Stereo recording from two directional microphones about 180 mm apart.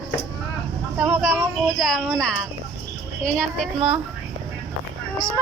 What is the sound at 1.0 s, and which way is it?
Speech, 10° right (ahead or behind).